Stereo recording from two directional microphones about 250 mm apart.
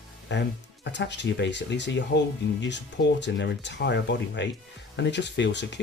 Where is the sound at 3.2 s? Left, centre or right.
Left.